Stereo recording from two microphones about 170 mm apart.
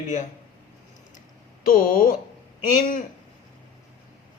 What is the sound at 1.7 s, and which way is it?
Speech, 55° left (ahead or behind).